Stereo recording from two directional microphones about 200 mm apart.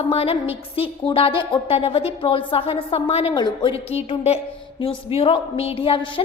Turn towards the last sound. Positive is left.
turn(degrees=25)  # may be behind; listen again after turning